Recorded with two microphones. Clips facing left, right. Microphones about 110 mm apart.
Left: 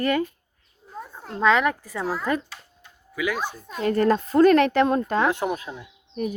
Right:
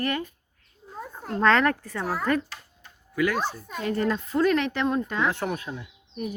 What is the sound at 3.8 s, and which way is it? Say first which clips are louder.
Speech: left 6 dB; 55° left (ahead or behind).